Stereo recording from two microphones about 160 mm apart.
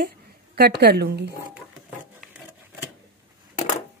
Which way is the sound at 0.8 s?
80° right.